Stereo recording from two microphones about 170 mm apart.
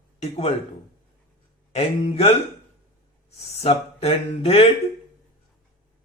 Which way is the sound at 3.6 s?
35° left (ahead or behind).